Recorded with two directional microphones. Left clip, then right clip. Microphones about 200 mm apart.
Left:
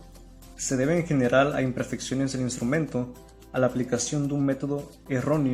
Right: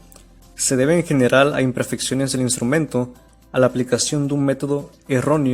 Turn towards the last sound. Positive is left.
turn(degrees=-50)  # may be behind; listen again after turning